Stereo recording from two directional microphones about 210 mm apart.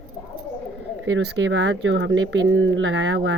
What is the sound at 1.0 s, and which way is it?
Speech, 65° right (ahead or behind).